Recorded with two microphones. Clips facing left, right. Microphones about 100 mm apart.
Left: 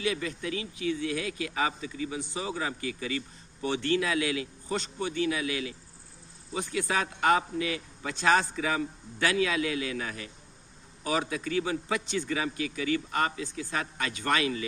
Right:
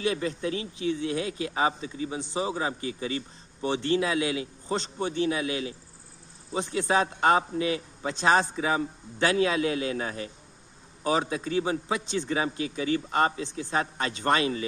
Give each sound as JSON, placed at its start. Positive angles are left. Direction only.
{"t": 0.0, "sound": "a man's voice", "side_deg": -35}